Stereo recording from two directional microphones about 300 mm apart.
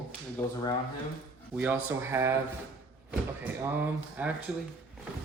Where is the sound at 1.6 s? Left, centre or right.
Centre.